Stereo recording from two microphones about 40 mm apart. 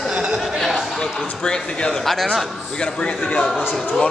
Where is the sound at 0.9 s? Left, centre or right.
Centre; by 3.4 s left.